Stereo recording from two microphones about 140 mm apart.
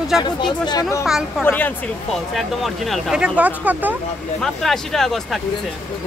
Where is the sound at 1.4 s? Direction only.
15° left (ahead or behind).